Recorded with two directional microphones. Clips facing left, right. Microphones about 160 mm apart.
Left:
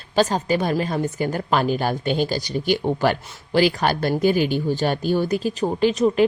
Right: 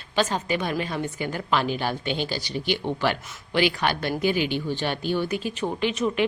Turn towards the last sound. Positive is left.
turn(degrees=35)  # may be behind; listen again after turning